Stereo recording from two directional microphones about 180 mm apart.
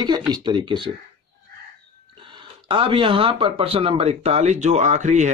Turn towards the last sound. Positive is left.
turn(degrees=-40)  # may be behind; listen again after turning